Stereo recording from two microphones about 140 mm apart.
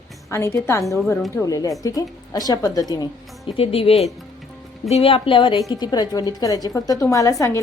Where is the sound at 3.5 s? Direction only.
40° left (ahead or behind).